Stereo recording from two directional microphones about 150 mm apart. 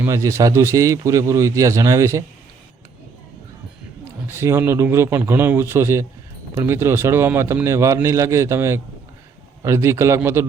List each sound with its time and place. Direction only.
0.0 s a man's voice: 20° right (ahead or behind)
4.3 s a man's voice: 15° right (ahead or behind)